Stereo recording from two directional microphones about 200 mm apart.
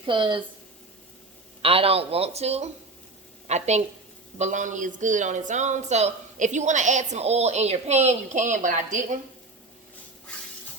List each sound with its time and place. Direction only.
0.0 s speech: 25° right (ahead or behind)
1.6 s a woman's voice: 30° right (ahead or behind)